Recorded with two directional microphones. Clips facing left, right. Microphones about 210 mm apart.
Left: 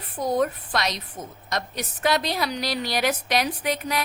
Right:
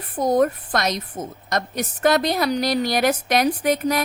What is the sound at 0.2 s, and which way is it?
A woman's voice, 45° right (ahead or behind).